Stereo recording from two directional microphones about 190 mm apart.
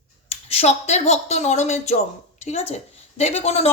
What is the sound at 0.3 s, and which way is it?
A woman's voice, 35° left (ahead or behind).